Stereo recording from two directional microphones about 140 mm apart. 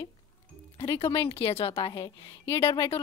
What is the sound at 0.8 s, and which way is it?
Speech, 35° left (ahead or behind).